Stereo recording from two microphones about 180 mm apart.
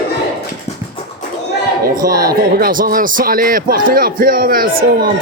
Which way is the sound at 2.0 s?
55° right (ahead or behind).